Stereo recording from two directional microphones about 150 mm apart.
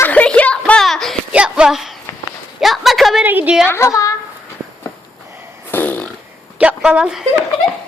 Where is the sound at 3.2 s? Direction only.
10° right (ahead or behind).